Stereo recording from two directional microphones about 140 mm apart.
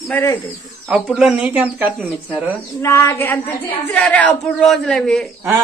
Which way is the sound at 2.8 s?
20° left (ahead or behind).